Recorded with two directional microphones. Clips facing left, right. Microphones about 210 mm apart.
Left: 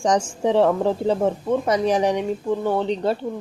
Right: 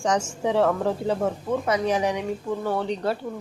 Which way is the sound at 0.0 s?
30° left (ahead or behind).